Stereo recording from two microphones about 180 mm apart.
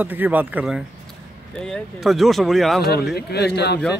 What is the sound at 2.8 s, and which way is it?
Speech, 65° left (ahead or behind).